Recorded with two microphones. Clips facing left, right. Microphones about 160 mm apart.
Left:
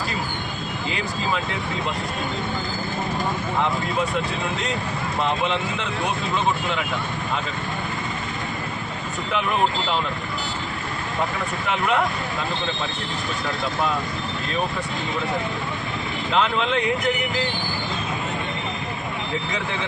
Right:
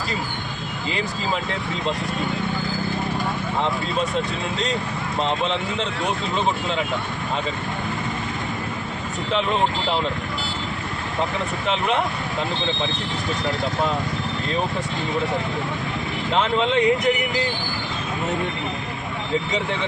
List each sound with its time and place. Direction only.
16.6 s speech: 20° right (ahead or behind)